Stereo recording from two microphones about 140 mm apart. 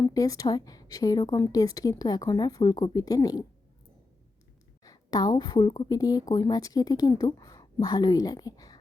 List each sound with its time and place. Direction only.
0.0 s a woman's voice: 25° left (ahead or behind)
4.8 s a woman's voice: 25° left (ahead or behind)